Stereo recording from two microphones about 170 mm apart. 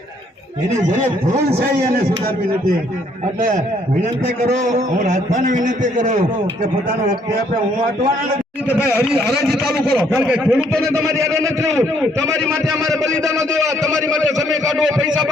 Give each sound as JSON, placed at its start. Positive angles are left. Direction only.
{"t": 4.5, "sound": "a man's voice", "side_deg": -45}
{"t": 8.9, "sound": "a man's voice", "side_deg": -5}
{"t": 10.8, "sound": "a man's voice", "side_deg": -20}